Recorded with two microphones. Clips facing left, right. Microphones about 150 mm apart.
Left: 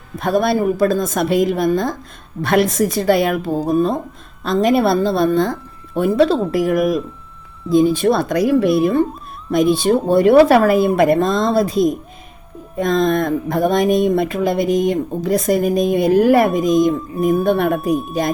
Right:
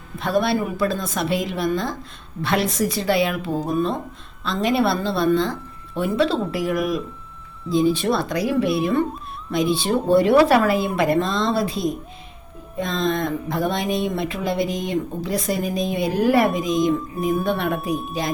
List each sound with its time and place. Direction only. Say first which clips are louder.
0.2 s speech: left 4 dB; 45° left (ahead or behind)